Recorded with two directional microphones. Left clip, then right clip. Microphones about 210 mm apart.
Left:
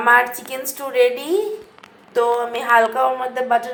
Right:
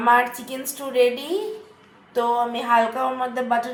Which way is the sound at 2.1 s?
20° left (ahead or behind).